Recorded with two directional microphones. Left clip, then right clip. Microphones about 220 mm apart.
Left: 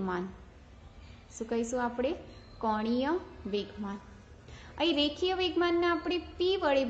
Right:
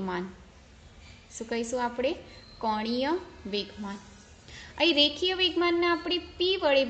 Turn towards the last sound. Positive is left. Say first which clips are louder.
# right 3 dB
turn(degrees=-15)  # may be behind; listen again after turning